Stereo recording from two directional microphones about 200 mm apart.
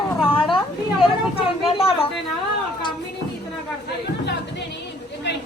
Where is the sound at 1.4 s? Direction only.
30° left (ahead or behind).